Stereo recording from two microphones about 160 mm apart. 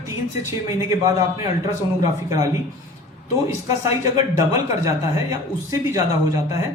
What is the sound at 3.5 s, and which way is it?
A man's voice, 15° right (ahead or behind).